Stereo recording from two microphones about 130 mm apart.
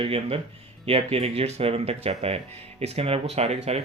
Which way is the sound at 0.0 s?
45° right (ahead or behind).